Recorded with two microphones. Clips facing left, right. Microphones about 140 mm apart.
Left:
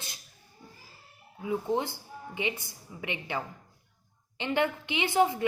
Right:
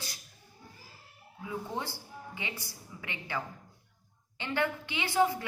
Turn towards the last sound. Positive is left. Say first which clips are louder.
# left 3 dB
turn(degrees=20)  # may be behind; listen again after turning